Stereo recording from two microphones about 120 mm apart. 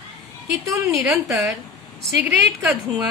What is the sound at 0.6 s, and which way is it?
Speech, 25° right (ahead or behind).